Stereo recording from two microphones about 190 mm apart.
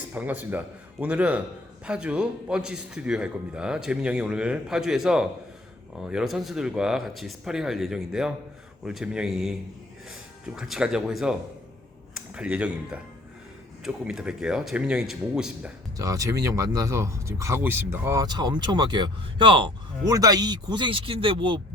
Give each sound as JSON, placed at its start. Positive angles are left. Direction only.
{"t": 0.1, "sound": "a man's voice", "side_deg": -10}
{"t": 16.0, "sound": "speech", "side_deg": -15}